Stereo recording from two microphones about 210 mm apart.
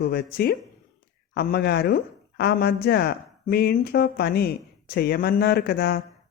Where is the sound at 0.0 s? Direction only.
45° left (ahead or behind).